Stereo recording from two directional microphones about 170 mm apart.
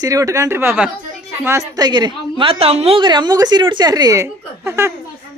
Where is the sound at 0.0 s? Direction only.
20° right (ahead or behind).